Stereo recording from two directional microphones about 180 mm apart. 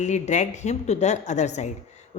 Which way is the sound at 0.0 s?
40° left (ahead or behind).